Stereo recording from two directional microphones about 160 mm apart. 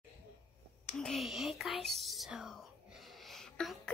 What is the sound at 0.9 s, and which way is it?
Whispering, centre (ahead or behind).